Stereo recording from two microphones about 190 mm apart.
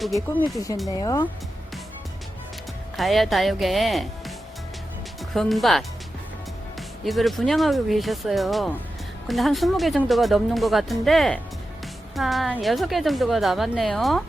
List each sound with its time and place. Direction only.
0.0 s speech: centre (ahead or behind)
0.9 s speech: 20° left (ahead or behind)
3.0 s speech: centre (ahead or behind)
5.3 s speech: centre (ahead or behind)
7.0 s speech: centre (ahead or behind)